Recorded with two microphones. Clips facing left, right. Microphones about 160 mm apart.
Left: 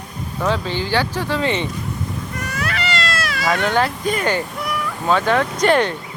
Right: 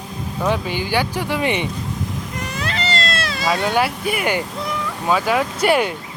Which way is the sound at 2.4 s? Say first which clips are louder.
Even; 25° right (ahead or behind).